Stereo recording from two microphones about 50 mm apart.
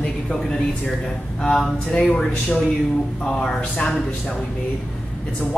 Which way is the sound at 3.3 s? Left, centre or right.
Centre.